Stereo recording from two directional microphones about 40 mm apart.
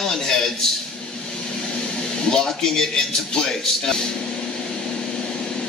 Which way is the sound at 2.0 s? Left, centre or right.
Centre.